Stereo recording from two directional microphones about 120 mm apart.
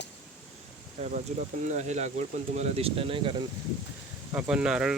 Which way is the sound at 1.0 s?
65° right (ahead or behind).